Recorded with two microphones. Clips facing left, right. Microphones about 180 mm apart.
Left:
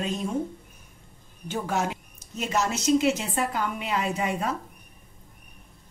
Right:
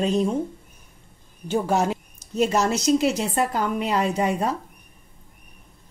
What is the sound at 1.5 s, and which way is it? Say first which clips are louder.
A woman's voice: right 6 dB; 35° right (ahead or behind).